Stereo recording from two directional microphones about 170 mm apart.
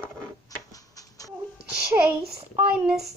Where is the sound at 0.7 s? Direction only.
20° left (ahead or behind).